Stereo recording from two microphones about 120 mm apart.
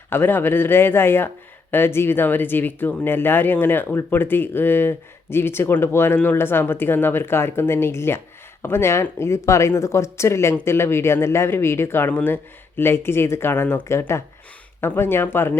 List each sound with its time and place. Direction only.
0.1 s speech: 20° left (ahead or behind)